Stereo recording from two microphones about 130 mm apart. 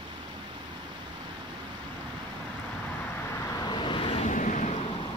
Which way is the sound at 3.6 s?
40° left (ahead or behind).